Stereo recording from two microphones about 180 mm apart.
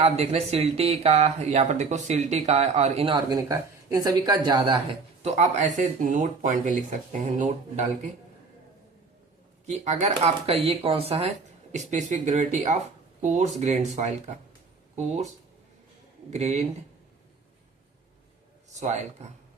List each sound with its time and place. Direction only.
0.0 s speech: 35° right (ahead or behind)
3.2 s speech: 20° right (ahead or behind)
5.2 s speech: 40° right (ahead or behind)
9.6 s speech: 40° right (ahead or behind)
16.3 s speech: 40° right (ahead or behind)
18.7 s speech: 40° right (ahead or behind)